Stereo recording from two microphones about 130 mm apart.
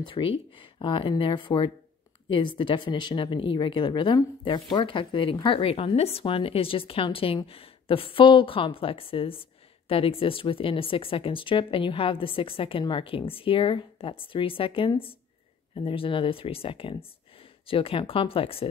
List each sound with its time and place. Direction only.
0.0 s a woman's voice: 45° left (ahead or behind)